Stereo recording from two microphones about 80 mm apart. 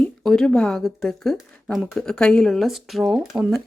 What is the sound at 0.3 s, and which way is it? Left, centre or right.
Speech, centre.